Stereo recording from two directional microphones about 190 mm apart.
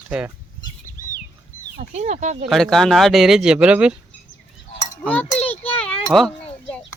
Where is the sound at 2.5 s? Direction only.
Centre (ahead or behind).